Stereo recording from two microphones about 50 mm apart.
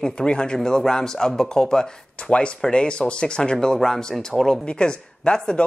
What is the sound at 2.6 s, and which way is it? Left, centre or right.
Speech, centre.